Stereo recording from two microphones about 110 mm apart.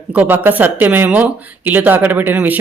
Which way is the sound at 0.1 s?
15° right (ahead or behind).